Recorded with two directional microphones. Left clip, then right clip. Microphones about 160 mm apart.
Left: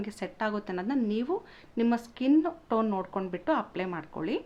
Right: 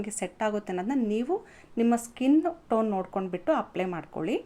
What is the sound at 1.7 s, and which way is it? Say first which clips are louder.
Speech: right 3 dB; 10° right (ahead or behind).